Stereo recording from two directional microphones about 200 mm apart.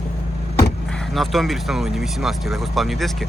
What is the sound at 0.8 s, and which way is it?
Speech, 5° left (ahead or behind).